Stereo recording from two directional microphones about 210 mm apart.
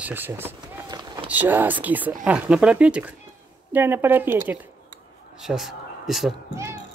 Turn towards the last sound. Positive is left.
turn(degrees=0)  # may be behind; listen again after turning